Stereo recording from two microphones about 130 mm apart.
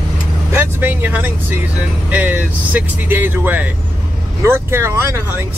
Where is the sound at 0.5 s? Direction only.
15° right (ahead or behind).